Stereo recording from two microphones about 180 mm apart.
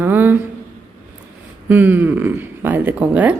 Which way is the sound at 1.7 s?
10° right (ahead or behind).